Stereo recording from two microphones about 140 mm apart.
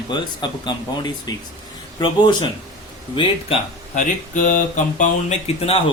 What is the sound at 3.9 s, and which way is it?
Speech, 65° left (ahead or behind).